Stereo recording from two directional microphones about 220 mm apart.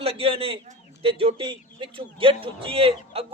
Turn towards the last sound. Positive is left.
turn(degrees=-25)  # may be behind; listen again after turning